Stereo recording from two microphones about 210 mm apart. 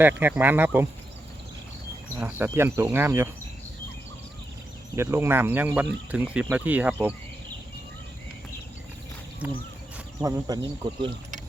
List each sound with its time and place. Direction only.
0.0 s speech: 10° right (ahead or behind)
2.1 s speech: 10° right (ahead or behind)
4.9 s speech: 10° right (ahead or behind)
10.2 s speech: 15° right (ahead or behind)